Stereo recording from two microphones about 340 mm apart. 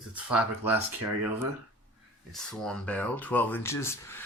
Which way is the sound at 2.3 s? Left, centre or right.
Centre.